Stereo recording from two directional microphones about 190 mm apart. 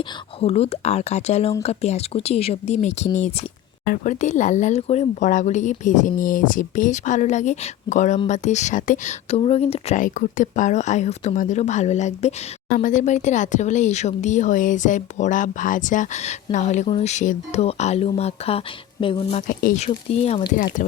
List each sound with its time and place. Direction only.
0.0 s speech: 30° left (ahead or behind)
19.4 s speech: 45° left (ahead or behind)
19.8 s speech: 30° left (ahead or behind)